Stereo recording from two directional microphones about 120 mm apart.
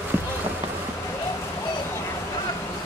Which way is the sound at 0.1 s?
15° right (ahead or behind).